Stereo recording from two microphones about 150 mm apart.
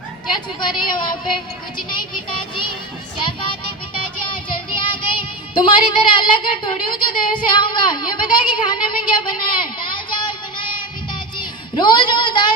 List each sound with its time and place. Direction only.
0.3 s a woman's voice: 30° left (ahead or behind)
3.2 s music: 30° left (ahead or behind)
4.8 s child singing: 35° left (ahead or behind)